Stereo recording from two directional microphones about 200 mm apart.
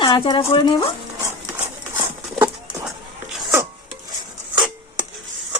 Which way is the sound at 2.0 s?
15° right (ahead or behind).